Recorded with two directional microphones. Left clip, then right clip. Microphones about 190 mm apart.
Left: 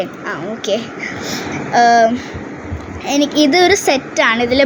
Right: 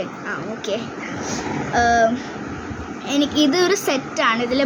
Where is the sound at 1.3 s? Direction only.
25° left (ahead or behind).